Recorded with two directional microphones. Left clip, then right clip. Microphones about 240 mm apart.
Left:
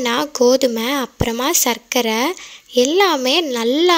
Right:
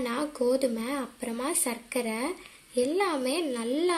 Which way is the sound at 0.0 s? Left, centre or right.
Left.